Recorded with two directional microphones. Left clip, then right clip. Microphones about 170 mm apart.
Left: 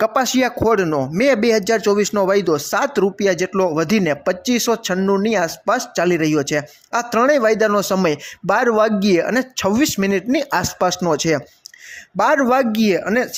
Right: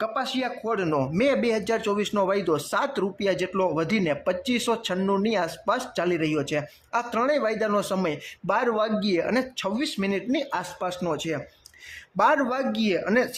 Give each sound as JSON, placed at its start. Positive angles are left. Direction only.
{"t": 0.0, "sound": "speech", "side_deg": 45}
{"t": 0.9, "sound": "speech", "side_deg": 20}
{"t": 9.2, "sound": "speech", "side_deg": 25}
{"t": 12.1, "sound": "speech", "side_deg": 25}
{"t": 12.5, "sound": "speech", "side_deg": 40}
{"t": 13.1, "sound": "speech", "side_deg": 25}